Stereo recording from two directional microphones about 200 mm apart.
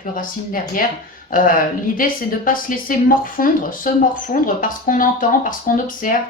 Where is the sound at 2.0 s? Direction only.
45° left (ahead or behind).